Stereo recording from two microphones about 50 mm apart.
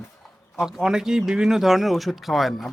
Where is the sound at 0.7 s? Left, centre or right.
Centre.